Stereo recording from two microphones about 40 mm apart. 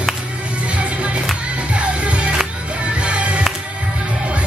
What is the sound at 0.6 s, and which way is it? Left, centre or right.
Music, right.